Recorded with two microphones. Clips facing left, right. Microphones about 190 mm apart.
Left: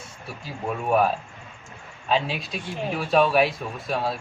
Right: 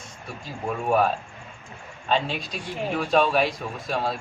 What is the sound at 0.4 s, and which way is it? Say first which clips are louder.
Speech: right 1 dB; centre (ahead or behind).